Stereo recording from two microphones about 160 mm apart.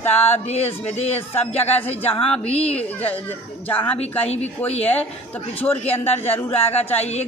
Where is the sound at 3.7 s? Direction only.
10° left (ahead or behind).